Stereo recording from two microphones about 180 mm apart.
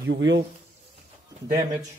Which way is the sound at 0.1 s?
90° right.